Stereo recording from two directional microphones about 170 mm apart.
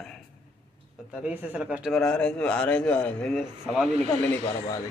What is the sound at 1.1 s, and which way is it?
A man's voice, 10° right (ahead or behind).